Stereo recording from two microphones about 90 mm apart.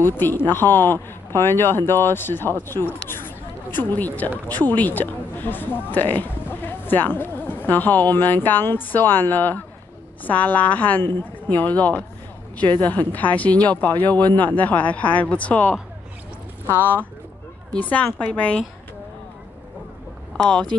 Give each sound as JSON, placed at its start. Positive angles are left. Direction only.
{"t": 0.5, "sound": "speech", "side_deg": 25}
{"t": 16.7, "sound": "speech", "side_deg": 20}
{"t": 20.3, "sound": "speech", "side_deg": 10}